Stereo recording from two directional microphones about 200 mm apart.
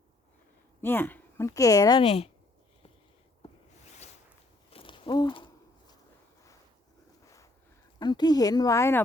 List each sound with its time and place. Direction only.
0.8 s speech: 10° left (ahead or behind); by 2.3 s 30° left (ahead or behind)
4.7 s a sound: 25° left (ahead or behind)
7.9 s speech: 20° left (ahead or behind)